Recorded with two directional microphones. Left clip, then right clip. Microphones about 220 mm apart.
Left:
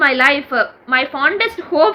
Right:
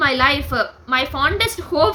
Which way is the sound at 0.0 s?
20° right (ahead or behind).